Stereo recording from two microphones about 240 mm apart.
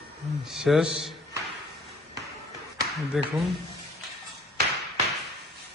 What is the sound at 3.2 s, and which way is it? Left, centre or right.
Speech, centre.